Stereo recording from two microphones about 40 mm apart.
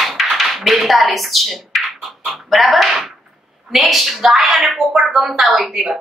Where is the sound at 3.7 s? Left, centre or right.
Centre.